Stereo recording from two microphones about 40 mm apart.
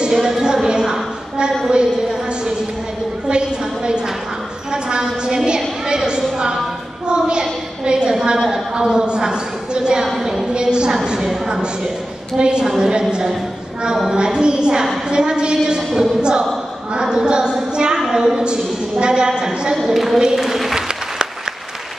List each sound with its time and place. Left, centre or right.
0.0 s a woman's voice: centre
8.4 s speech: centre
8.7 s a woman's voice: right
10.2 s a woman's voice: centre
10.5 s a woman's voice: right
14.1 s a woman's voice: right
19.8 s speech: centre